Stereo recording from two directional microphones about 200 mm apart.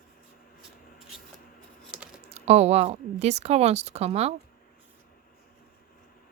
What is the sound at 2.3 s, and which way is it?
Speech, 30° right (ahead or behind).